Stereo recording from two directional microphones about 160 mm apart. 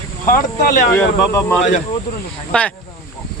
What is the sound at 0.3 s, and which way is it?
Speech, 60° left (ahead or behind).